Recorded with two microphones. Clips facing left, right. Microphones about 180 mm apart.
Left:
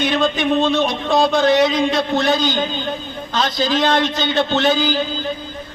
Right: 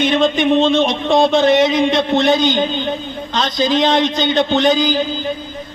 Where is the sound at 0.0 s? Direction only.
20° right (ahead or behind).